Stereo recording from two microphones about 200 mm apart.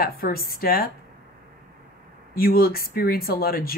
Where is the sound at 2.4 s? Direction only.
50° left (ahead or behind).